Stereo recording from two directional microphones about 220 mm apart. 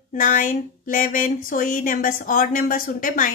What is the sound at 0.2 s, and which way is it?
Speech, 35° left (ahead or behind).